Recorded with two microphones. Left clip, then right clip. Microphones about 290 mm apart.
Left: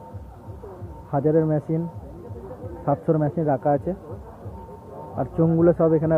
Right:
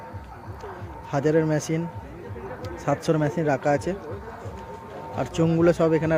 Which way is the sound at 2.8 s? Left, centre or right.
Centre.